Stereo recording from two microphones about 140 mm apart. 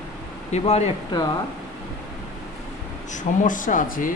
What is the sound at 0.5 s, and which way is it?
Speech, 50° left (ahead or behind).